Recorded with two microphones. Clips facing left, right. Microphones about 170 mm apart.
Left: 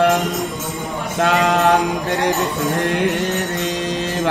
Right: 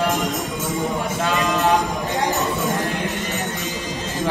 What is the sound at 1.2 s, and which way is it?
Music, 65° left (ahead or behind).